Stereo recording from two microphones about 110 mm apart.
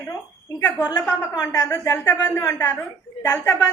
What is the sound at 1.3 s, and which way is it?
A woman's voice, 30° left (ahead or behind).